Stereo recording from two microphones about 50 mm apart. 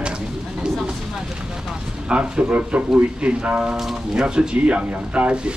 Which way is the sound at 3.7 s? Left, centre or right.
Centre.